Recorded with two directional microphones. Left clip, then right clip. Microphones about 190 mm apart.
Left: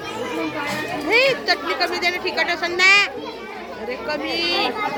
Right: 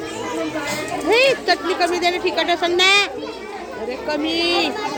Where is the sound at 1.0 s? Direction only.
40° right (ahead or behind).